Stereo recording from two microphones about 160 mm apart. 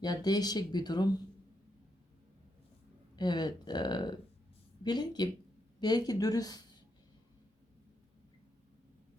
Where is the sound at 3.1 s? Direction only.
25° left (ahead or behind).